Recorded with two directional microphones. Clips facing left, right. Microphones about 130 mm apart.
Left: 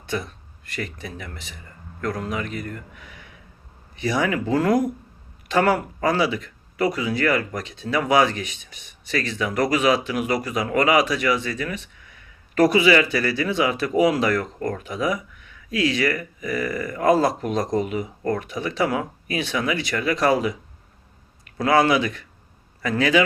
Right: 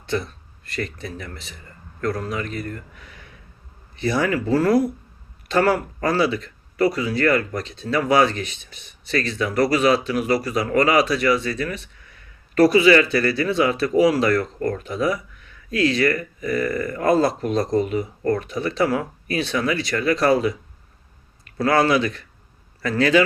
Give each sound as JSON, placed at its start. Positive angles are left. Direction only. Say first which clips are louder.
{"t": 0.8, "sound": "speech", "louder": "right 3 dB", "side_deg": 15}
{"t": 3.9, "sound": "speech", "louder": "right 1 dB", "side_deg": 15}
{"t": 6.0, "sound": "speech", "louder": "right 1 dB", "side_deg": 15}
{"t": 21.6, "sound": "speech", "louder": "even", "side_deg": 20}